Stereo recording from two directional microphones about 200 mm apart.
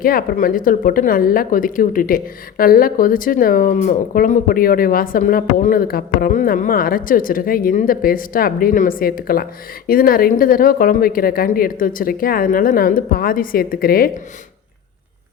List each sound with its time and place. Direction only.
0.0 s speech: 45° left (ahead or behind)